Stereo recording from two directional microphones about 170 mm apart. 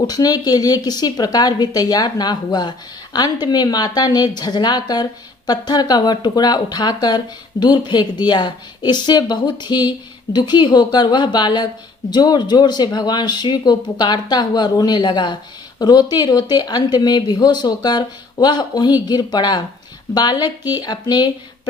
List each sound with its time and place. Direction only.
0.1 s speech: 20° left (ahead or behind)